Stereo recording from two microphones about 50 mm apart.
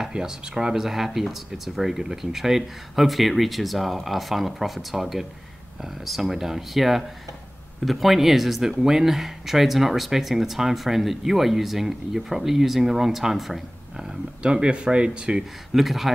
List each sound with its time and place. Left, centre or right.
0.0 s speech: centre
14.0 s speech: right
15.7 s speech: centre